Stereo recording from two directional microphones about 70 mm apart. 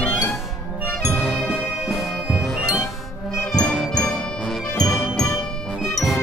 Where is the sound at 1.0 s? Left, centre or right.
Centre.